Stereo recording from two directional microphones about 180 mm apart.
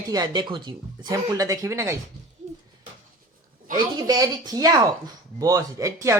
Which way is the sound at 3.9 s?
20° right (ahead or behind).